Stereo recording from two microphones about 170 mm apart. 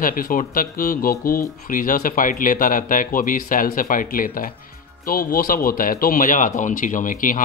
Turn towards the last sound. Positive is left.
turn(degrees=50)  # may be behind; listen again after turning